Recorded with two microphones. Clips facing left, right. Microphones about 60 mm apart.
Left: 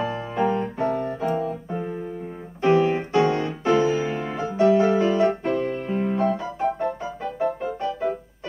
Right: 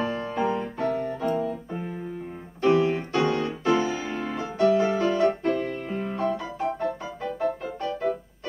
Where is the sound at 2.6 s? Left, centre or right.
Centre.